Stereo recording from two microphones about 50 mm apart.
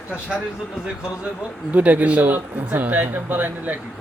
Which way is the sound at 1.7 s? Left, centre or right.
Right.